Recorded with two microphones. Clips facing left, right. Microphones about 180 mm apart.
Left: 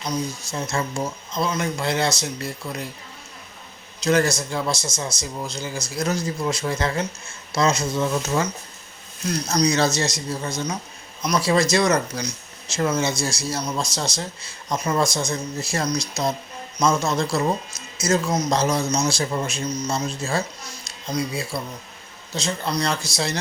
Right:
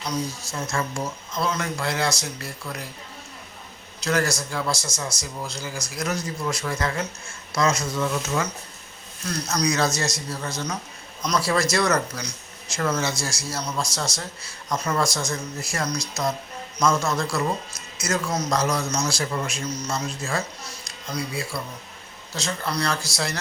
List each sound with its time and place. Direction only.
0.5 s a man's voice: 20° left (ahead or behind)
4.0 s a man's voice: 20° left (ahead or behind)
16.7 s a man's voice: 15° left (ahead or behind)